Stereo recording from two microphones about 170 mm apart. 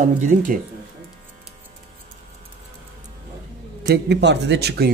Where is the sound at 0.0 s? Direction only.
50° right (ahead or behind).